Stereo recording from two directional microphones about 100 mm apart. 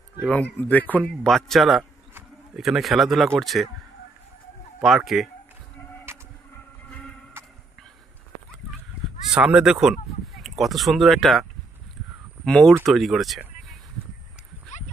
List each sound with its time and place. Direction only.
0.2 s speech: 15° left (ahead or behind)
1.3 s speech: centre (ahead or behind)
4.7 s speech: centre (ahead or behind)
6.1 s a sound: 25° right (ahead or behind)
6.9 s a sound: 10° left (ahead or behind)
9.3 s speech: 10° right (ahead or behind)
12.4 s speech: 10° left (ahead or behind)